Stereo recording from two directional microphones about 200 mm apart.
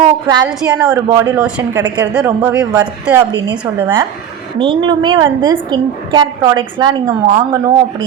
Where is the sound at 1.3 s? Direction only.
5° right (ahead or behind).